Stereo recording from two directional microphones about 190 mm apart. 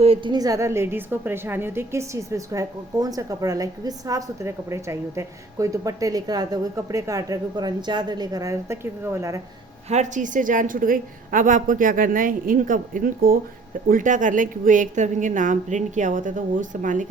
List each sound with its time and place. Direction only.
0.0 s a woman's voice: 30° right (ahead or behind)
9.9 s a woman's voice: 40° right (ahead or behind)